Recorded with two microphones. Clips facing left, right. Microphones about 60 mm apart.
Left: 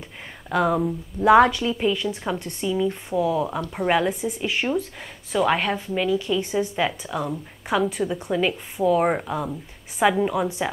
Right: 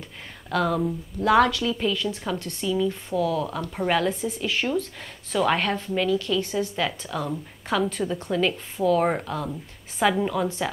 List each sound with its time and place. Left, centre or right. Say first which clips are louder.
0.5 s a woman's voice: left 2 dB; centre